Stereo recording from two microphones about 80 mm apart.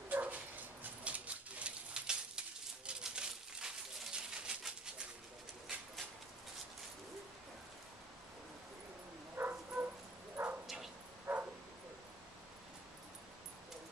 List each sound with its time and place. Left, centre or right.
0.1 s dog: centre
1.0 s bird: centre
2.9 s a sound: centre
9.4 s bow-wow: right